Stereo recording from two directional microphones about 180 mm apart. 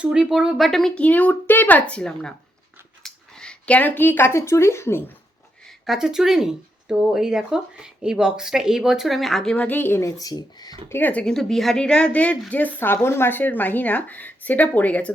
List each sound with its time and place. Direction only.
0.0 s speech: 5° right (ahead or behind); by 5.1 s 15° left (ahead or behind)
5.8 s speech: centre (ahead or behind)